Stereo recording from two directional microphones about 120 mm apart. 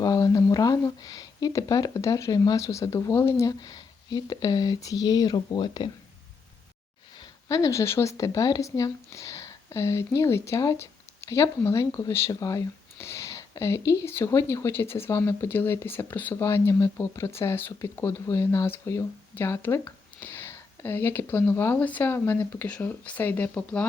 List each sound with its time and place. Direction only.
0.0 s speech: 30° left (ahead or behind)
7.4 s speech: 30° left (ahead or behind); by 23.8 s 10° left (ahead or behind)